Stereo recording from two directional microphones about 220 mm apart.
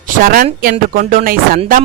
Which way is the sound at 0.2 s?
40° right (ahead or behind).